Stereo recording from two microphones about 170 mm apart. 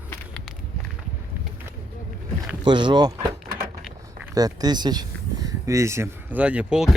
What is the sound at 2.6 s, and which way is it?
Speech, 25° right (ahead or behind).